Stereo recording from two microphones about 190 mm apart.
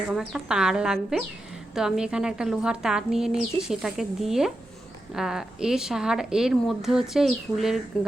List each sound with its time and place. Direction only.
0.1 s a woman's voice: 5° right (ahead or behind)